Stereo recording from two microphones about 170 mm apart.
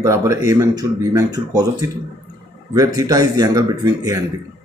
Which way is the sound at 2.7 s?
25° right (ahead or behind).